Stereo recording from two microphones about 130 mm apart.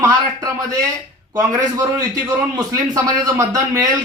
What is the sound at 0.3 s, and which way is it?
A man's voice, 25° right (ahead or behind).